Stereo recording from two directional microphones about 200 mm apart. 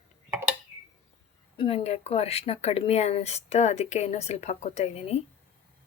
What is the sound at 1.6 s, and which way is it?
Speech, 30° left (ahead or behind).